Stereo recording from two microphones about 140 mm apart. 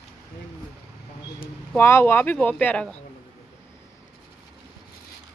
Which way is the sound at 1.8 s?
15° left (ahead or behind).